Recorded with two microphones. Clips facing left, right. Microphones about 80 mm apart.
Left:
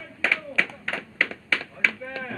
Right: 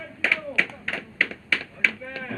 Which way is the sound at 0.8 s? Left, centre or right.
Left.